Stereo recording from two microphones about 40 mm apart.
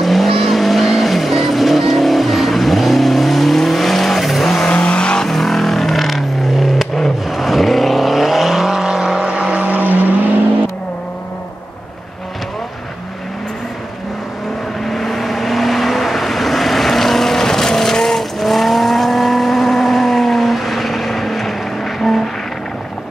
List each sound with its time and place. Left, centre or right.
0.0 s vehicle: centre
4.6 s vehicle: left
5.2 s vehicle: centre
8.8 s vehicle: centre
9.6 s vehicle: right
14.9 s vehicle: centre